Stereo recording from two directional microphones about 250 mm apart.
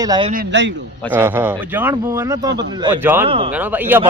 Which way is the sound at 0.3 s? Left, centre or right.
Right.